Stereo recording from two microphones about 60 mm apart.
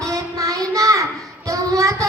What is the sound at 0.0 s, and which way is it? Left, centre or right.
Child singing, right.